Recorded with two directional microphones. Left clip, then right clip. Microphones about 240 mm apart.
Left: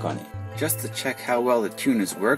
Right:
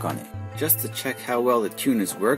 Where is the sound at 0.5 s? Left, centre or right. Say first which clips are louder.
Even; centre.